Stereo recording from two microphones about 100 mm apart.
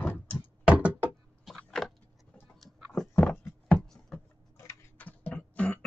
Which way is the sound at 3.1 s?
15° left (ahead or behind).